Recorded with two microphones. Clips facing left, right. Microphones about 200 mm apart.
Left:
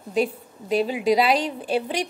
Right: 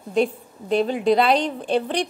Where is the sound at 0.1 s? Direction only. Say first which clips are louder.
Right 2 dB; 5° left (ahead or behind).